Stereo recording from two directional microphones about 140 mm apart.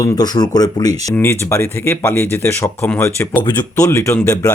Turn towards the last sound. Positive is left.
turn(degrees=20)  # may be behind; listen again after turning